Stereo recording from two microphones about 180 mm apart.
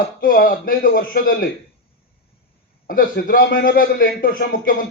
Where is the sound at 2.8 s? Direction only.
50° left (ahead or behind).